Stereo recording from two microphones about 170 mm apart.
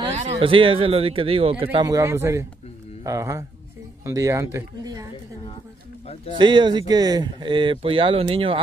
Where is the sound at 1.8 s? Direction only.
20° right (ahead or behind).